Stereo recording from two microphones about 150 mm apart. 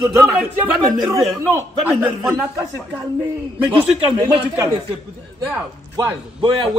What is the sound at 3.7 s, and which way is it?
Speech, 30° right (ahead or behind).